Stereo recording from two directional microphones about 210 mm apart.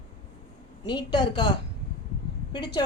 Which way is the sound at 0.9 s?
20° left (ahead or behind).